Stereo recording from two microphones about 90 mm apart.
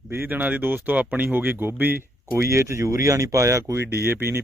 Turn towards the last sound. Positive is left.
turn(degrees=-30)  # may be behind; listen again after turning